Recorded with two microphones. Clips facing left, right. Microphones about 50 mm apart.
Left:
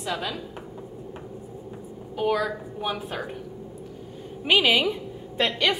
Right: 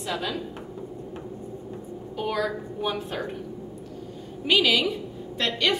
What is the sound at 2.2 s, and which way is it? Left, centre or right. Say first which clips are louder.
A woman's voice: left 3 dB; centre.